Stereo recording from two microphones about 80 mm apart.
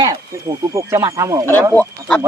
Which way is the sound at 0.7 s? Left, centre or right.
Right.